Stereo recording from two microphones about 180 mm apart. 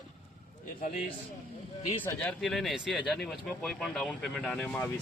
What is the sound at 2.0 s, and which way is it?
Speech, 10° left (ahead or behind).